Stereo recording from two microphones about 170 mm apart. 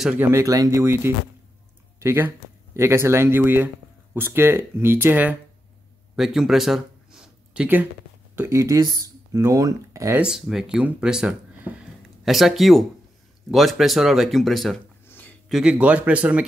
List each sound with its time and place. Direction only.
0.0 s speech: 10° right (ahead or behind)
6.1 s a sound: centre (ahead or behind)
8.4 s speech: 15° right (ahead or behind)
10.2 s speech: centre (ahead or behind)
15.0 s a sound: 10° left (ahead or behind)
15.4 s speech: 5° right (ahead or behind)